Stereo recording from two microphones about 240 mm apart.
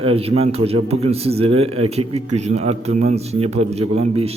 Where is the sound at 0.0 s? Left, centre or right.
Right.